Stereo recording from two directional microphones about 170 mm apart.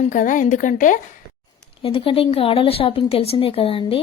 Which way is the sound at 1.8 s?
30° left (ahead or behind).